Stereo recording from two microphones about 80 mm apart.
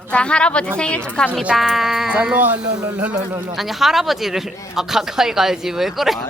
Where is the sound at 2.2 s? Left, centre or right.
Centre.